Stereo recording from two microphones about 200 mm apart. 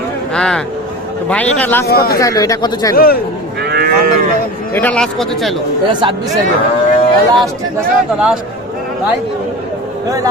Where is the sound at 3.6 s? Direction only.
55° right (ahead or behind).